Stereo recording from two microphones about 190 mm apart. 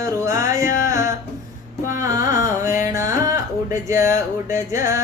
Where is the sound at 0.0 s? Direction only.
15° right (ahead or behind).